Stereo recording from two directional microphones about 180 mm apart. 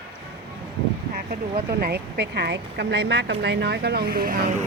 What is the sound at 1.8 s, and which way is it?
Speech, 65° right (ahead or behind).